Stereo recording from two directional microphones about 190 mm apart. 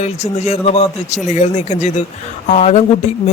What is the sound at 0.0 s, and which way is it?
Speech, 35° left (ahead or behind).